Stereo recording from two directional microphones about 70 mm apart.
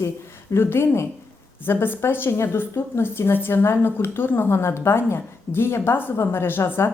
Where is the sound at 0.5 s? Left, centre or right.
Left.